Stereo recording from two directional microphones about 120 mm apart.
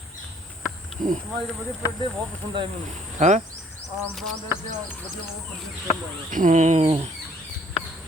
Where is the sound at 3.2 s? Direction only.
80° right.